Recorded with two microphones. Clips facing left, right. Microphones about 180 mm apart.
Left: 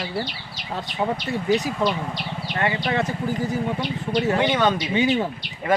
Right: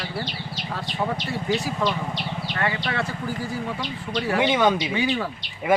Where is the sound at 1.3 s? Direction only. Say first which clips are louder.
Left 4 dB; 20° left (ahead or behind).